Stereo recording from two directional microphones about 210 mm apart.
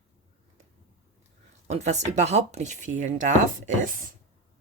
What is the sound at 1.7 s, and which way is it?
Speech, 35° right (ahead or behind).